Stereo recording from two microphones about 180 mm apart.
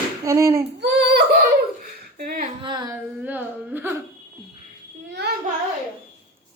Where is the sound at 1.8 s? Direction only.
55° right (ahead or behind).